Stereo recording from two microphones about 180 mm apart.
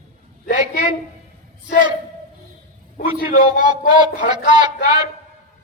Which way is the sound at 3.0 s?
45° left (ahead or behind).